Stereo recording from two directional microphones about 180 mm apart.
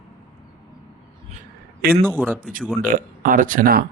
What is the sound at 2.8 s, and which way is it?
Speech, 50° right (ahead or behind).